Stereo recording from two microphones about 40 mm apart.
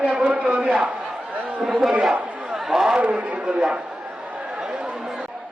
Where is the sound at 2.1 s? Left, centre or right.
Right.